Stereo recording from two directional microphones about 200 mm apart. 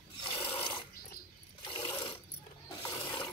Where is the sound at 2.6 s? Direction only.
20° left (ahead or behind).